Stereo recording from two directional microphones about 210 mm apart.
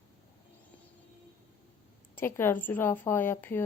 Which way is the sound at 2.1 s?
10° left (ahead or behind).